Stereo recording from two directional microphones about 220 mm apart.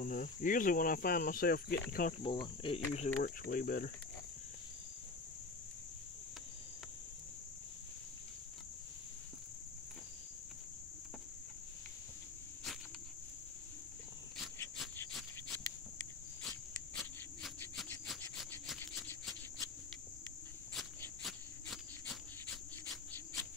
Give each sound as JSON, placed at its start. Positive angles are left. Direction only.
{"t": 0.0, "sound": "speech", "side_deg": 35}
{"t": 2.2, "sound": "speech", "side_deg": 20}
{"t": 3.4, "sound": "speech", "side_deg": 40}
{"t": 15.0, "sound": "a sound", "side_deg": 5}
{"t": 21.2, "sound": "cricket", "side_deg": 0}